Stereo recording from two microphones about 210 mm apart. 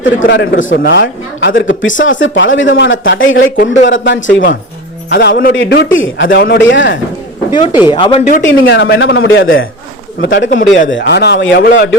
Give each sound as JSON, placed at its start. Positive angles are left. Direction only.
{"t": 0.3, "sound": "speech", "side_deg": 60}
{"t": 3.4, "sound": "speech", "side_deg": 40}
{"t": 3.8, "sound": "speech", "side_deg": 60}
{"t": 5.1, "sound": "speech", "side_deg": 45}
{"t": 5.5, "sound": "speech", "side_deg": 55}
{"t": 7.5, "sound": "speech", "side_deg": 20}
{"t": 8.4, "sound": "speech", "side_deg": 65}
{"t": 10.2, "sound": "speech", "side_deg": 55}